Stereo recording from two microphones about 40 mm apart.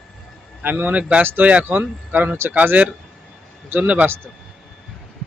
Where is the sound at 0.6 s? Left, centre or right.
Right.